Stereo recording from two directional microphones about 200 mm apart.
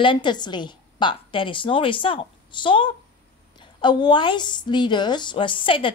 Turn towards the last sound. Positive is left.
turn(degrees=25)  # may be behind; listen again after turning